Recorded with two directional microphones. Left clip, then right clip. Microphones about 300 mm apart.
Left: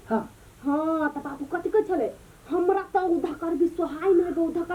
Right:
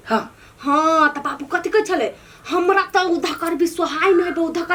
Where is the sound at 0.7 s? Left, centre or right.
Centre.